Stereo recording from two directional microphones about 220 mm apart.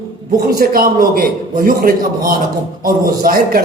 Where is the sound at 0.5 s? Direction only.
40° right (ahead or behind).